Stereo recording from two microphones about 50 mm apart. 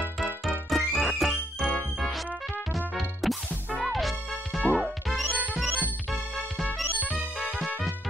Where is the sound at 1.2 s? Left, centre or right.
Left.